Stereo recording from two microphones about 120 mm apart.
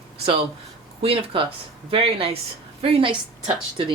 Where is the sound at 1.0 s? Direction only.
50° right (ahead or behind).